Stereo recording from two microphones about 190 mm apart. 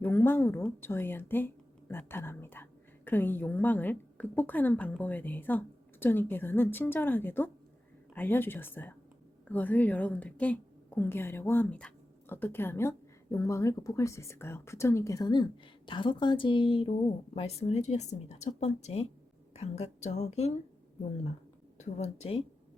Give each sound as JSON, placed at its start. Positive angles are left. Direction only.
{"t": 0.0, "sound": "a woman's voice", "side_deg": 10}
{"t": 21.8, "sound": "speech", "side_deg": 35}